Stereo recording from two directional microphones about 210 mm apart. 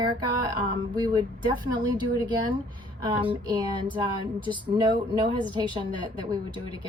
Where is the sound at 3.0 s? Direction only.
20° right (ahead or behind).